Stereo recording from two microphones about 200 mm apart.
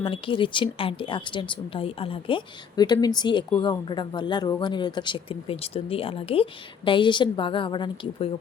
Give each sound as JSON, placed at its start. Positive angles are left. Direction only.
{"t": 0.0, "sound": "speech", "side_deg": 25}